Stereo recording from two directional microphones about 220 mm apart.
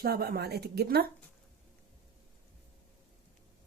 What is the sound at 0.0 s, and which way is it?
Speech, 45° right (ahead or behind).